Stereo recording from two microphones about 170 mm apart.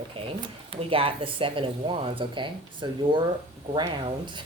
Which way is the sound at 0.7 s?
35° right (ahead or behind).